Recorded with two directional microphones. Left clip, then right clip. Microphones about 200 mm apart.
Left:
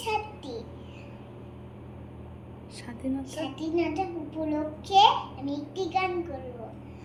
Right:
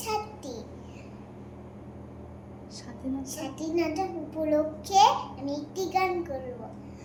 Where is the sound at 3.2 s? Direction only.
15° right (ahead or behind).